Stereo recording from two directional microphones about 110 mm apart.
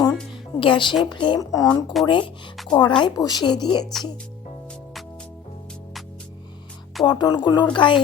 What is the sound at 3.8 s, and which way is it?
Speech, centre (ahead or behind).